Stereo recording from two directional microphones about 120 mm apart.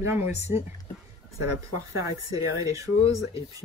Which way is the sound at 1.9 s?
25° right (ahead or behind).